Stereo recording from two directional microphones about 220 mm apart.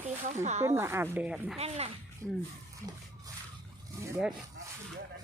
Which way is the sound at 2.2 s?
Centre (ahead or behind).